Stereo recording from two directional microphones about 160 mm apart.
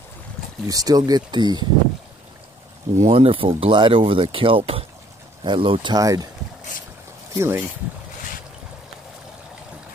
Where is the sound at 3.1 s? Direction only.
35° right (ahead or behind).